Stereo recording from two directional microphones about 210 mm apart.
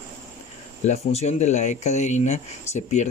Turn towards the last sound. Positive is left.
turn(degrees=35)  # may be behind; listen again after turning